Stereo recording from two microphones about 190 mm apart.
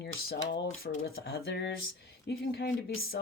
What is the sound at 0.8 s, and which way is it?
Speech, 55° left (ahead or behind).